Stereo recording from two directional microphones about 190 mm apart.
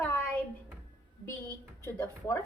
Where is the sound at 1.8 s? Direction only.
15° left (ahead or behind).